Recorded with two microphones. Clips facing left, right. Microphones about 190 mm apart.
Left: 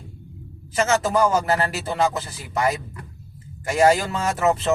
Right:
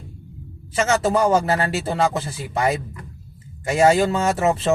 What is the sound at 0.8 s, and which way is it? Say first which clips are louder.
A man's voice: right 1 dB; 30° right (ahead or behind).